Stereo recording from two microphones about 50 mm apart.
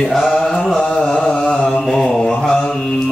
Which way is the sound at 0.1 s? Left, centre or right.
Centre.